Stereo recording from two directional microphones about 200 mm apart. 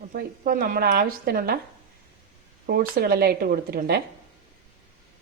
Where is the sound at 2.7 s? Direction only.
50° right (ahead or behind).